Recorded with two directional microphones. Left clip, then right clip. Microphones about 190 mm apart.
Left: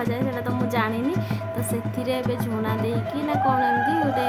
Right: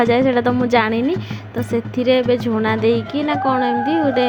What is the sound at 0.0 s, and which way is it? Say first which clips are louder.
A woman's voice: right 12 dB; 30° right (ahead or behind).